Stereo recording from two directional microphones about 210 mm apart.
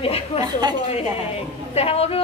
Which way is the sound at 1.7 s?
30° left (ahead or behind).